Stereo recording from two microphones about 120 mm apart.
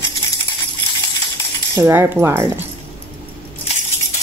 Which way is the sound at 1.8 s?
20° right (ahead or behind).